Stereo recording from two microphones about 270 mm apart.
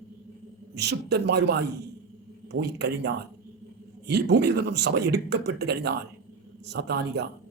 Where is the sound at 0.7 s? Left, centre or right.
Right.